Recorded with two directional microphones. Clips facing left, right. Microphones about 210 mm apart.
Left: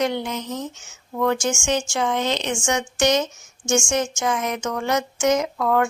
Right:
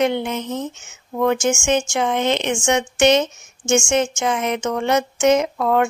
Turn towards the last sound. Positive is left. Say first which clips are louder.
# right 2 dB
turn(degrees=-25)  # may be behind; listen again after turning